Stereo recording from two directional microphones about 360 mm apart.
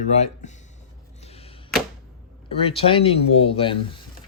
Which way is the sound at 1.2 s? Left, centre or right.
Centre.